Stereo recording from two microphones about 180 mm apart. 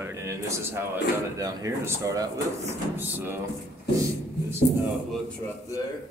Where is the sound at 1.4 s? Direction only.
20° right (ahead or behind).